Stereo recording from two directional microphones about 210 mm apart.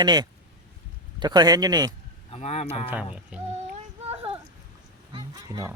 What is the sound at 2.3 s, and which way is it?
Speech, 30° left (ahead or behind).